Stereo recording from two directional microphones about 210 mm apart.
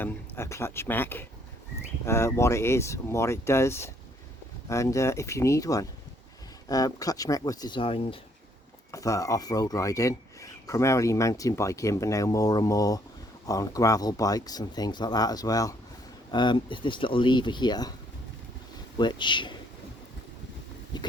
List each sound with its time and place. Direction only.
0.0 s speech: 15° left (ahead or behind)
8.9 s speech: 15° left (ahead or behind)
18.9 s speech: 20° left (ahead or behind)
20.9 s speech: 20° left (ahead or behind)